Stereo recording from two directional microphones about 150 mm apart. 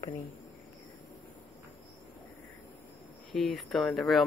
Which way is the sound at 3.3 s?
5° left (ahead or behind).